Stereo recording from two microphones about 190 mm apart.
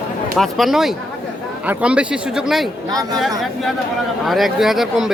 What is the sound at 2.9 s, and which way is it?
Speech, 20° right (ahead or behind).